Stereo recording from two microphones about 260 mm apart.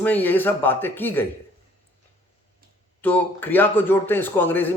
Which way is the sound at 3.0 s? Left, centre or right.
Centre.